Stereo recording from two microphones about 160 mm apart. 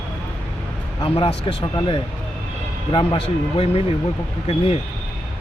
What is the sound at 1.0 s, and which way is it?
Speech, 35° left (ahead or behind).